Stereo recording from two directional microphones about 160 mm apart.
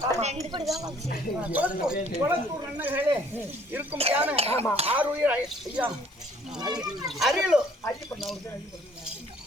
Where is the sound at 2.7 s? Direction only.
10° right (ahead or behind).